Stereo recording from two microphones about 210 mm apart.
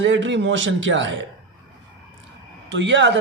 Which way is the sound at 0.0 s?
60° right (ahead or behind).